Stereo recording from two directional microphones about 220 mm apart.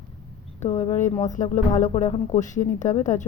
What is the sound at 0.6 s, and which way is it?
Speech, 30° left (ahead or behind).